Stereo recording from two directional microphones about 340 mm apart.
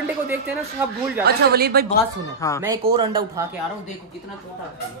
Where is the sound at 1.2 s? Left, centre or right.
Right.